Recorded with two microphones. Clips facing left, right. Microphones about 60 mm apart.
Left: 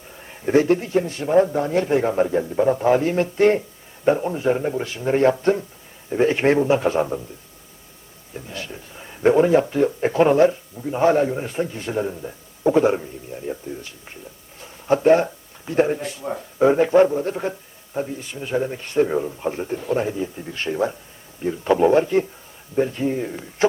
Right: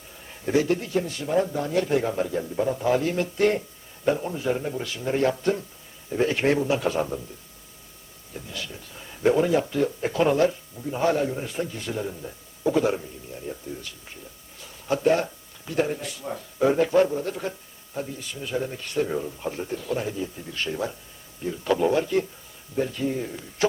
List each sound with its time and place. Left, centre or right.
0.5 s a man's voice: left
8.3 s a man's voice: left